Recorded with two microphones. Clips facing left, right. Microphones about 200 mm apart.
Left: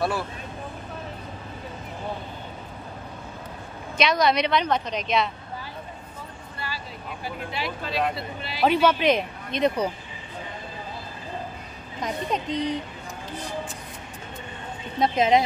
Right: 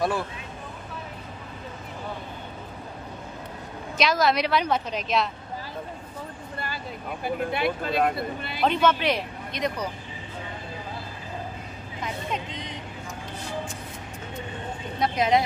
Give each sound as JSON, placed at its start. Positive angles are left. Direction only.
{"t": 4.0, "sound": "a woman's voice", "side_deg": 0}
{"t": 7.2, "sound": "speech", "side_deg": -55}
{"t": 8.5, "sound": "speech", "side_deg": 10}
{"t": 12.0, "sound": "speech", "side_deg": 40}
{"t": 15.0, "sound": "speech", "side_deg": 25}